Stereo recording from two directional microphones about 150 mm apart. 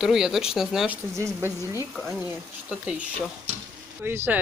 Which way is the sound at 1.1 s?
20° right (ahead or behind).